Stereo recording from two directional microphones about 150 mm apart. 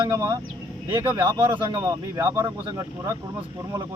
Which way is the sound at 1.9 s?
20° right (ahead or behind).